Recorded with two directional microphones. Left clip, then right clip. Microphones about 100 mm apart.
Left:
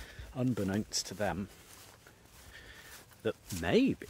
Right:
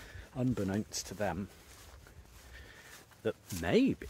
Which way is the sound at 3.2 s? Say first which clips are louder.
Left 1 dB; 25° left (ahead or behind).